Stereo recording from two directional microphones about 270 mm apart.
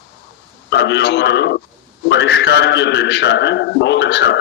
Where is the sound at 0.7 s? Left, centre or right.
Left.